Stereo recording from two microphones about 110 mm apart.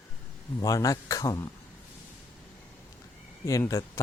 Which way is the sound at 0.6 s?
30° left (ahead or behind).